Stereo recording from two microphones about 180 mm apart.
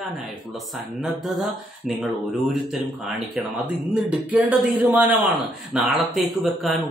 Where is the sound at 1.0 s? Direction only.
Centre (ahead or behind).